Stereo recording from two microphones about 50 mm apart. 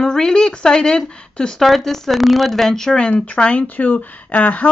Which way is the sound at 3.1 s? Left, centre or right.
Left.